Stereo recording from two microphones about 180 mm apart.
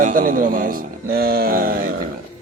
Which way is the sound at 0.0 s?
50° right (ahead or behind).